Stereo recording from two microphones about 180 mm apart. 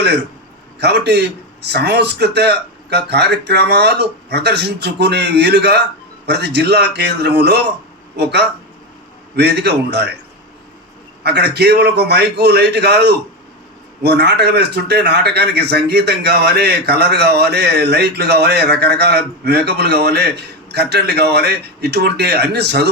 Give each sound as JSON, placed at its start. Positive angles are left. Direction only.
{"t": 0.8, "sound": "speech", "side_deg": -65}
{"t": 11.2, "sound": "speech", "side_deg": -65}